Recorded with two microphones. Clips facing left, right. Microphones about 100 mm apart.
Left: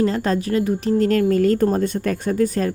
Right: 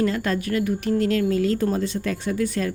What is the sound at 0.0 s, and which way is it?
Speech, 35° left (ahead or behind).